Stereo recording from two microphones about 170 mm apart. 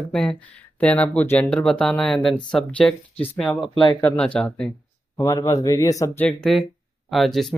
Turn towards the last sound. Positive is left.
turn(degrees=0)  # may be behind; listen again after turning